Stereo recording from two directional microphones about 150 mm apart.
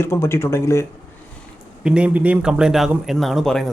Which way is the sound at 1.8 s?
5° right (ahead or behind).